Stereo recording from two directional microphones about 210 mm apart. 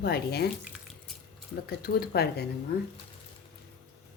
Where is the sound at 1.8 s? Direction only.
50° left (ahead or behind).